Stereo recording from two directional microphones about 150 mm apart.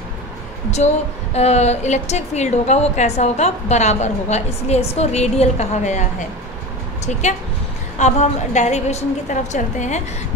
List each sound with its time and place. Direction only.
0.7 s a woman's voice: 50° left (ahead or behind)